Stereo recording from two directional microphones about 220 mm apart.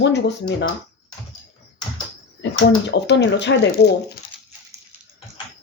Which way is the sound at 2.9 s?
50° left (ahead or behind).